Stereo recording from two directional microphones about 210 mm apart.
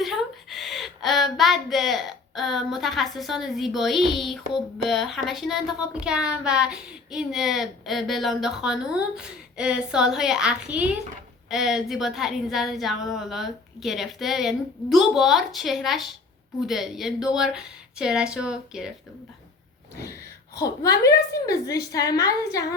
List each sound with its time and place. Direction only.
0.0 s speech: centre (ahead or behind)
4.2 s a sound: centre (ahead or behind)
20.6 s a woman's voice: 15° left (ahead or behind)